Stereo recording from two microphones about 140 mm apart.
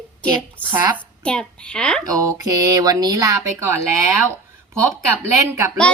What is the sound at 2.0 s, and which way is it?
A woman's voice, 25° right (ahead or behind).